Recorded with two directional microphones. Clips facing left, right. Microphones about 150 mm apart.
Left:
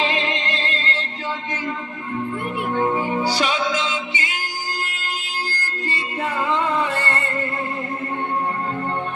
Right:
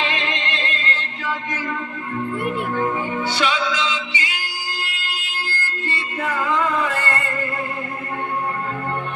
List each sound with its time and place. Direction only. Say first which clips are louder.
0.0 s music: left 2 dB; 30° left (ahead or behind)
2.7 s music: left 2 dB; 25° left (ahead or behind)
3.2 s music: even; 40° left (ahead or behind)